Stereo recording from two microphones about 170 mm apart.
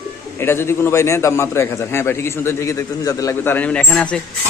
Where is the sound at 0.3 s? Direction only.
15° left (ahead or behind).